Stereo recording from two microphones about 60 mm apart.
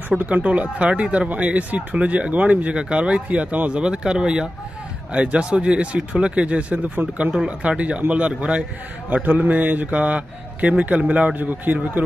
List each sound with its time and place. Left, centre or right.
0.2 s speech: right